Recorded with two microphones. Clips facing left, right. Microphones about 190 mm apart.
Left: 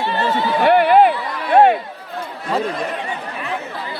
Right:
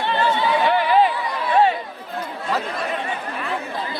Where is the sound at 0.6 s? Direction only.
55° left (ahead or behind).